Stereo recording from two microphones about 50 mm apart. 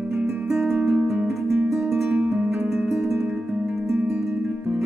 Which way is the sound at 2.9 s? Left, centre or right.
Centre.